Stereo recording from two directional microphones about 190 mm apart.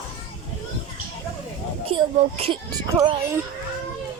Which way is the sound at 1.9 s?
30° right (ahead or behind).